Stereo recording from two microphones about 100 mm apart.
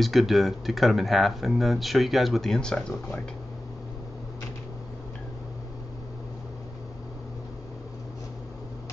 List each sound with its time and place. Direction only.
0.0 s speech: centre (ahead or behind)